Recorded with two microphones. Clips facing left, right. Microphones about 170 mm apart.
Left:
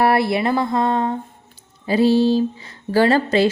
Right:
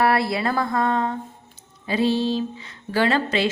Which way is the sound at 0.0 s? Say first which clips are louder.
Left 3 dB; 25° left (ahead or behind).